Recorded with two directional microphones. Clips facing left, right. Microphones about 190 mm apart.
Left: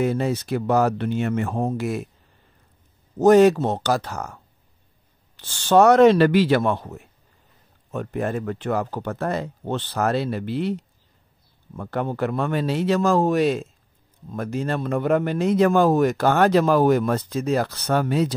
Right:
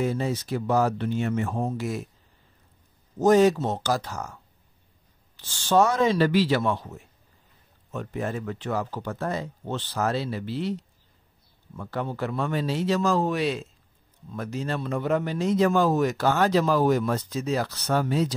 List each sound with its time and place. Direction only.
0.0 s a man's voice: 65° left (ahead or behind)
3.2 s a man's voice: 65° left (ahead or behind)